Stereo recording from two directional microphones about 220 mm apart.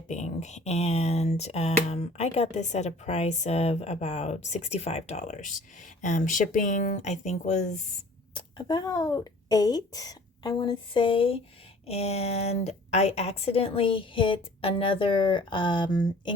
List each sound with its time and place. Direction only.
0.1 s speech: 30° left (ahead or behind)